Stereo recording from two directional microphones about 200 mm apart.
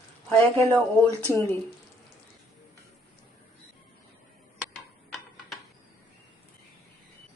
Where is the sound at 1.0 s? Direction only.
10° left (ahead or behind).